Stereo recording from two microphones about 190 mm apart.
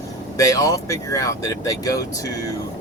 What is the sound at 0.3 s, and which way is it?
Speech, 15° left (ahead or behind).